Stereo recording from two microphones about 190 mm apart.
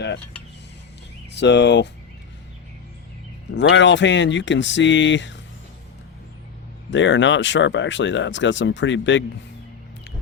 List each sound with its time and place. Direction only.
1.3 s speech: 65° left (ahead or behind)
3.5 s speech: 70° left (ahead or behind)
6.9 s speech: 70° left (ahead or behind)